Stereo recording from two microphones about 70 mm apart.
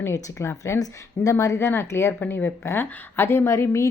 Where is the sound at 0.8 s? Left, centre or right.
Left.